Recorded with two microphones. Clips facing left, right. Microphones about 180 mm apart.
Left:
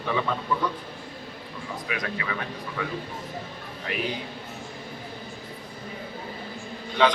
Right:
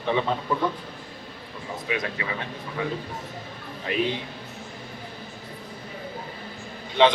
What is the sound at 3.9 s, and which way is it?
Speech, 25° right (ahead or behind).